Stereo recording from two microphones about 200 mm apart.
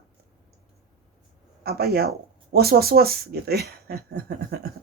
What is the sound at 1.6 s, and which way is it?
Speech, 50° right (ahead or behind).